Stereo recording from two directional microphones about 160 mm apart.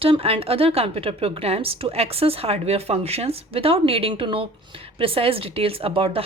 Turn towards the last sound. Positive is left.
turn(degrees=-35)  # may be behind; listen again after turning